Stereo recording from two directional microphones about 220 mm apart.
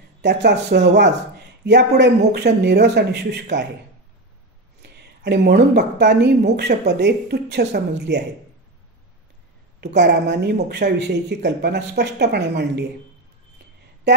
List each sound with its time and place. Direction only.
0.2 s speech: 50° right (ahead or behind)
4.8 s speech: 50° right (ahead or behind)
9.9 s speech: 50° right (ahead or behind)